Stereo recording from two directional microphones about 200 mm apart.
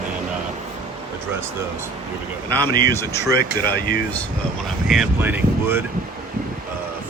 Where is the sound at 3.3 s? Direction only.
50° left (ahead or behind).